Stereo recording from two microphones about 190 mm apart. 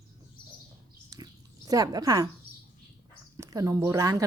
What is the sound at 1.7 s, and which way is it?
Speech, 20° right (ahead or behind).